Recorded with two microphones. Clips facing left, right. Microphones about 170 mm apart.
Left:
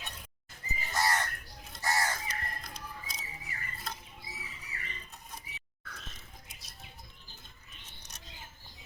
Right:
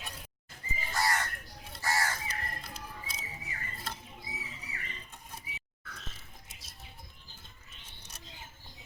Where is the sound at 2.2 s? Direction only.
5° right (ahead or behind).